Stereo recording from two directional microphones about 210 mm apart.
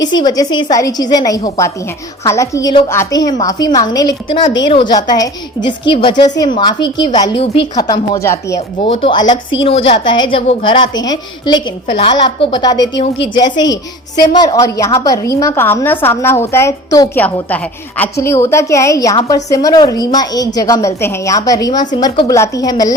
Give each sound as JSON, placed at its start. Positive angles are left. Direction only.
{"t": 0.2, "sound": "a woman's voice", "side_deg": 20}